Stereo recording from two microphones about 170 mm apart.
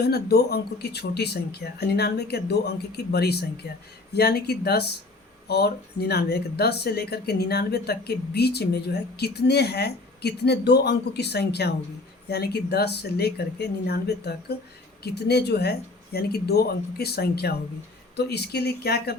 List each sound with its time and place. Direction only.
0.0 s speech: 70° left (ahead or behind)